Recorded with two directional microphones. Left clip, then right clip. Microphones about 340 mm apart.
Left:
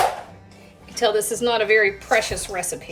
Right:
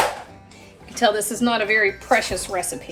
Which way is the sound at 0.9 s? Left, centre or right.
Centre.